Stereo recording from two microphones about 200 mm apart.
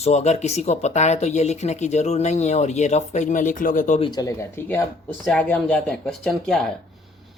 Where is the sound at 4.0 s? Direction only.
20° left (ahead or behind); by 6.7 s centre (ahead or behind).